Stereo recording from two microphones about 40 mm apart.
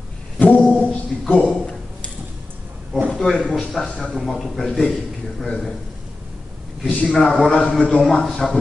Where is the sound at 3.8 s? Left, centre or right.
Centre.